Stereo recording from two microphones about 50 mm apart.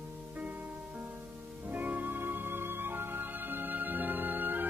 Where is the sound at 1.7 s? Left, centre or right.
Right.